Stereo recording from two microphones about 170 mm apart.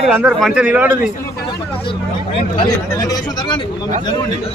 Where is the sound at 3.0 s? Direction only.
25° left (ahead or behind).